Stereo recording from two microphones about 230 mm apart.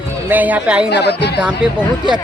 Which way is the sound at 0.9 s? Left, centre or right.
Left.